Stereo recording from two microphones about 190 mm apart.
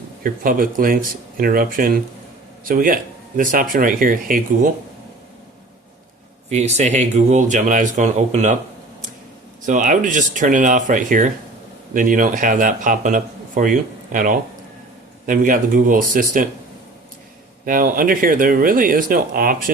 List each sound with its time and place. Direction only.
0.2 s a man's voice: 50° right (ahead or behind)
6.5 s speech: 35° right (ahead or behind)
9.6 s a man's voice: 45° right (ahead or behind)
17.7 s a man's voice: 45° right (ahead or behind)